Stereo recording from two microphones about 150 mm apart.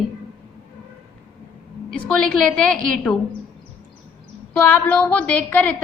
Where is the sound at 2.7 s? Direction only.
5° left (ahead or behind).